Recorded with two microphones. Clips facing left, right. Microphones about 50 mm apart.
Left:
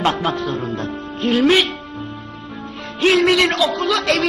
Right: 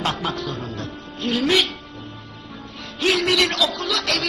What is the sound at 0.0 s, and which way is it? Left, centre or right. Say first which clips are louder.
A woman's voice: left 6 dB; left.